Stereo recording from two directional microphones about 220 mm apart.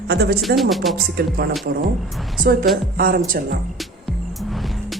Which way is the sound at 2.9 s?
40° right (ahead or behind).